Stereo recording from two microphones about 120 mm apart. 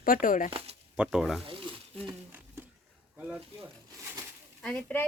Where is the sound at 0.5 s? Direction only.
60° right (ahead or behind).